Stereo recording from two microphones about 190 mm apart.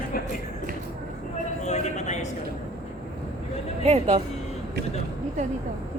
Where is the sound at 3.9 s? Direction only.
35° right (ahead or behind).